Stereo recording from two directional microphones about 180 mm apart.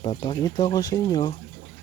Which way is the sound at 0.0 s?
25° left (ahead or behind).